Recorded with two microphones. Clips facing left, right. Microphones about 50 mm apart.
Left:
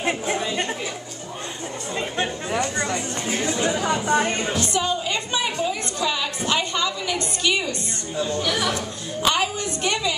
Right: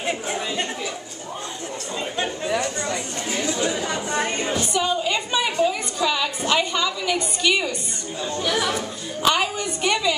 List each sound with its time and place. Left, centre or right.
2.4 s chatter: left
3.3 s chatter: left
3.9 s a sound: centre